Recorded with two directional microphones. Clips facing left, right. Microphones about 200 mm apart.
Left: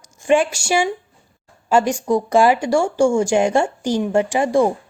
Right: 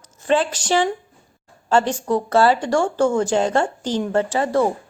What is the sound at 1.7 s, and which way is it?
Speech, 10° left (ahead or behind).